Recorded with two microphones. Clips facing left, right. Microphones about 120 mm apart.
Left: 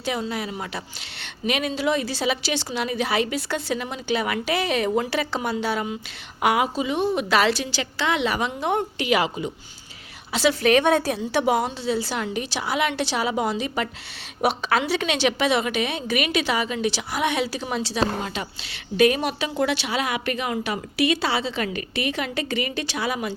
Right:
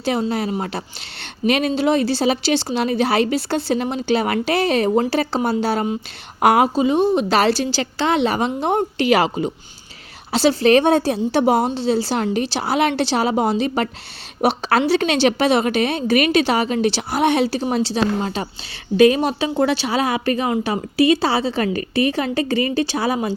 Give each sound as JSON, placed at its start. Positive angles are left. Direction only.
{"t": 0.0, "sound": "a woman's voice", "side_deg": -35}